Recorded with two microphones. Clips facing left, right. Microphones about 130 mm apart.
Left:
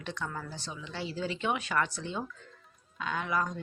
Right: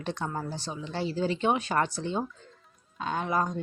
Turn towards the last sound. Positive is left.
turn(degrees=-35)  # may be behind; listen again after turning